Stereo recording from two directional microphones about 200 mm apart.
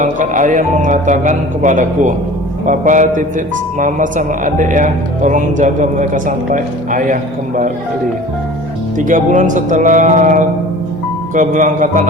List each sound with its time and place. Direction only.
0.0 s speech: 40° right (ahead or behind)
9.0 s speech: 40° right (ahead or behind)